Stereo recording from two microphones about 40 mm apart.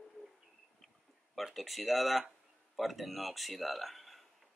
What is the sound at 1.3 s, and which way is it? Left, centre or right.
Speech, centre.